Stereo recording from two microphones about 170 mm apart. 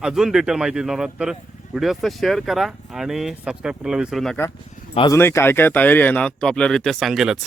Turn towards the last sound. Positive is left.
turn(degrees=0)  # may be behind; listen again after turning